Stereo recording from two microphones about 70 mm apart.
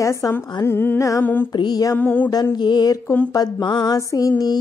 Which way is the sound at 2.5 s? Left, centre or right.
Left.